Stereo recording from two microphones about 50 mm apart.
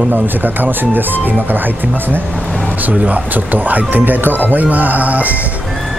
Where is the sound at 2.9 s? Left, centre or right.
Right.